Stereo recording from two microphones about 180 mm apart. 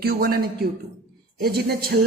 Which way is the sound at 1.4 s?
60° right (ahead or behind).